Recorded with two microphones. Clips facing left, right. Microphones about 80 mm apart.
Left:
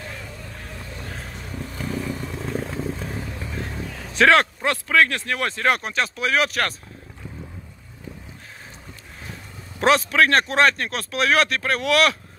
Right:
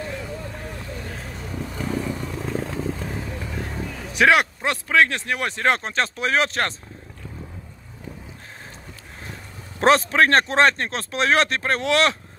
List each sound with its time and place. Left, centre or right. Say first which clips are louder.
1.8 s vehicle: right 1 dB; centre
4.1 s speech: left 1 dB; centre
9.8 s speech: right 1 dB; right